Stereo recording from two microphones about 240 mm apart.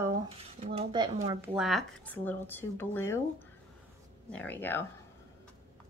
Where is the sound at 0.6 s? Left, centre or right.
Right.